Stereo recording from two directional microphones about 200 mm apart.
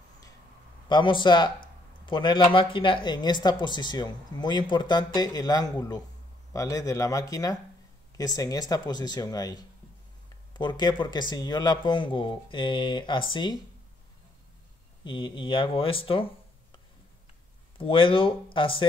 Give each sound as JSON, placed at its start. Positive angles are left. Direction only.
{"t": 0.8, "sound": "a woman's voice", "side_deg": 25}
{"t": 15.0, "sound": "a woman's voice", "side_deg": 25}
{"t": 17.7, "sound": "a woman's voice", "side_deg": 25}